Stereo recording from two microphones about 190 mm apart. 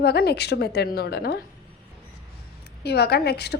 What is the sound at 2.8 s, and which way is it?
Speech, 60° left (ahead or behind).